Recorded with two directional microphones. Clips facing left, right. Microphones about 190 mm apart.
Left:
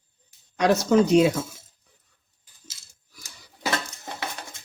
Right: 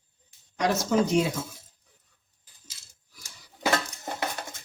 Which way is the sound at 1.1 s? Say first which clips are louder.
Left 7 dB; 80° left.